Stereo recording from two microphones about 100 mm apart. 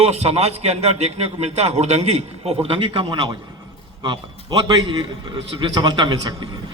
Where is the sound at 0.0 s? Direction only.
90° right; by 3.3 s 50° right (ahead or behind).